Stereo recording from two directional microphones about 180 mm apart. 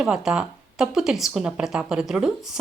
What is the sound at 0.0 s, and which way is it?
A woman's voice, 5° right (ahead or behind).